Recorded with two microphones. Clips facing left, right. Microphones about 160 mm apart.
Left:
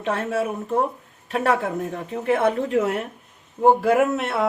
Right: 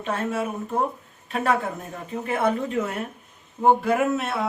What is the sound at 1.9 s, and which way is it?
Speech, 75° left (ahead or behind).